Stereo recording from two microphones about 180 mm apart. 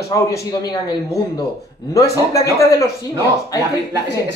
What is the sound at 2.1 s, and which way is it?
Speech, 20° left (ahead or behind).